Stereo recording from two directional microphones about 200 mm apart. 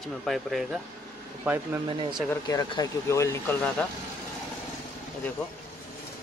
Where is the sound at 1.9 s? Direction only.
25° right (ahead or behind).